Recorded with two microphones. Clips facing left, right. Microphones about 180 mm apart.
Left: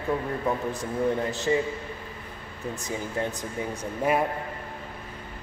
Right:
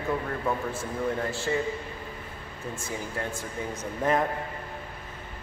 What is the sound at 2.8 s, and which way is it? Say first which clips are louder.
Speech: left 4 dB; 15° left (ahead or behind).